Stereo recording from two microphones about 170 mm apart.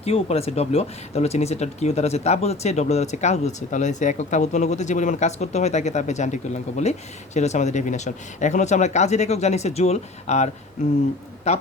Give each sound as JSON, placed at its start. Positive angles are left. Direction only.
{"t": 0.0, "sound": "speech", "side_deg": 35}